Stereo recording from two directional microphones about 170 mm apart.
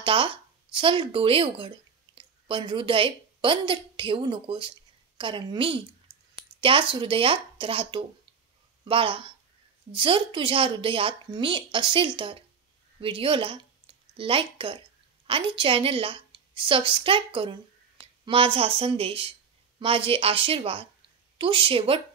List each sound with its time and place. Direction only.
0.0 s a woman's voice: 30° right (ahead or behind)